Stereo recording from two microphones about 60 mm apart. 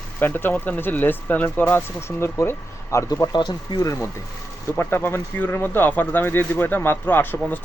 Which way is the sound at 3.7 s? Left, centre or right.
Left.